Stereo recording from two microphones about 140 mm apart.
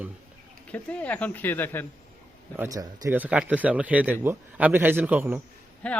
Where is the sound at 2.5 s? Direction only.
15° right (ahead or behind).